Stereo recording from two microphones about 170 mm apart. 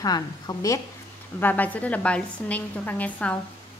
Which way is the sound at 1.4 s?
10° left (ahead or behind).